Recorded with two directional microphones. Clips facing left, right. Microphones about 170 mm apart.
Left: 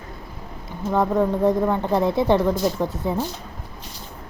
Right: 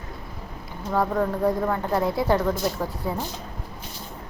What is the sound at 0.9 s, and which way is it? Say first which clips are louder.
A woman's voice: left 3 dB; 20° left (ahead or behind).